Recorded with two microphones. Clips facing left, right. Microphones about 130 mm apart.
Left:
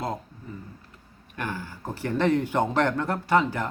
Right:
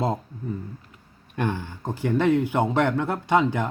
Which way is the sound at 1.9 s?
15° right (ahead or behind).